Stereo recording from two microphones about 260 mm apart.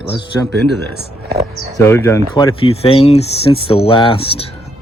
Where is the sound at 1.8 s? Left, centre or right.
Centre.